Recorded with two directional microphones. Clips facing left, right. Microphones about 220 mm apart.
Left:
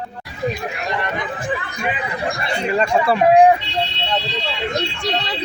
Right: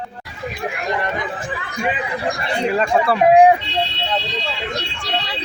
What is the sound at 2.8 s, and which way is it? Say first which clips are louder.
Speech: left 2 dB; centre (ahead or behind).